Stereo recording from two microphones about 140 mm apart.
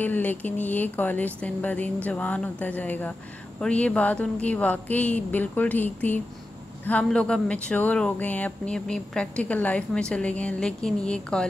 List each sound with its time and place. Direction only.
0.0 s speech: 15° left (ahead or behind)